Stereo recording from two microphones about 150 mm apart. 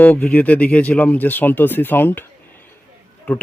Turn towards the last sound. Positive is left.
turn(degrees=15)  # may be behind; listen again after turning